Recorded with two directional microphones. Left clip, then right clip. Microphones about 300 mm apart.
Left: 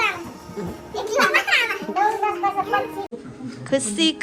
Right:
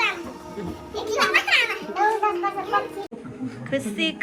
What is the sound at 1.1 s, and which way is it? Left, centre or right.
Music, left.